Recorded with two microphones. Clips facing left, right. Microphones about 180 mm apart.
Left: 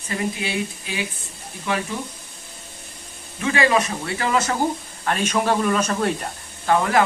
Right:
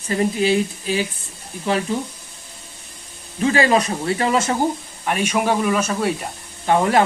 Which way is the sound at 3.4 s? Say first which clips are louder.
Right 3 dB; 35° right (ahead or behind).